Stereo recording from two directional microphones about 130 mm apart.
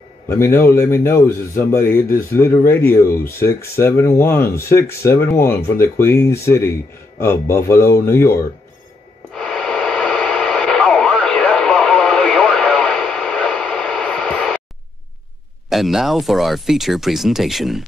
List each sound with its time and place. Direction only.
0.3 s a man's voice: 20° left (ahead or behind)
9.3 s radio: 5° left (ahead or behind)
15.7 s speech: centre (ahead or behind)